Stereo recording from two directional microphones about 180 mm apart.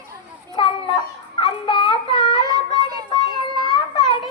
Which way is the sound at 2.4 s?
20° right (ahead or behind).